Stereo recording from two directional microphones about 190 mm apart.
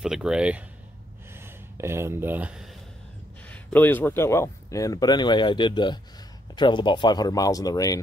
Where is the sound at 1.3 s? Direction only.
15° right (ahead or behind).